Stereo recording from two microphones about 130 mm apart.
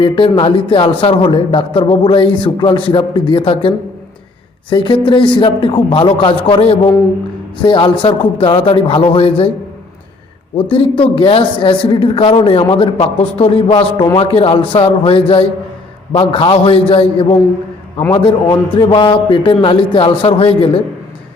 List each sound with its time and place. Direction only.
0.0 s a man's voice: 40° left (ahead or behind)
10.6 s a man's voice: 45° left (ahead or behind)